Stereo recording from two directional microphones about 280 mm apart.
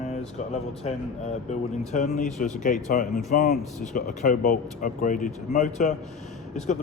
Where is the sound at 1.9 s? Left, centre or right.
Left.